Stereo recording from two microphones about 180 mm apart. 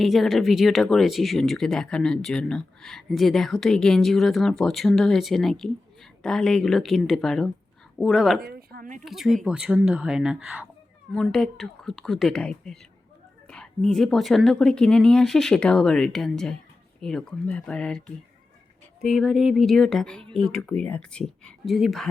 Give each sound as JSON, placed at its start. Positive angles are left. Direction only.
{"t": 0.0, "sound": "speech", "side_deg": 0}
{"t": 8.4, "sound": "a woman's voice", "side_deg": -60}
{"t": 9.0, "sound": "speech", "side_deg": 0}
{"t": 11.1, "sound": "speech", "side_deg": 5}